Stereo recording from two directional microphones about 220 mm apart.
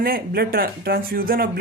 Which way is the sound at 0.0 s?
40° right (ahead or behind).